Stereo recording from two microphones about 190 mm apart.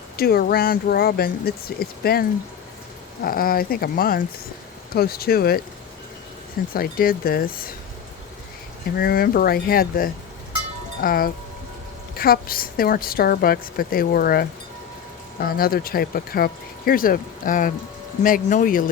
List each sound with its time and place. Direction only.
0.2 s speech: 55° left (ahead or behind)
3.2 s speech: 50° left (ahead or behind)
6.7 s speech: 50° left (ahead or behind)
9.0 s speech: 50° left (ahead or behind)